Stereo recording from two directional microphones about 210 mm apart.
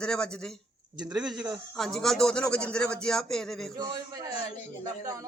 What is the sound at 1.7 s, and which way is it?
A man's voice, centre (ahead or behind).